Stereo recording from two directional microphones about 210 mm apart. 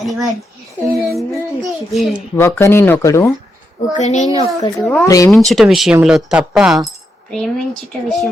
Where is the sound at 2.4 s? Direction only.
10° left (ahead or behind).